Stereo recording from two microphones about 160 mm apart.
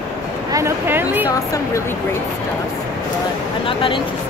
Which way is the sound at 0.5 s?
15° right (ahead or behind).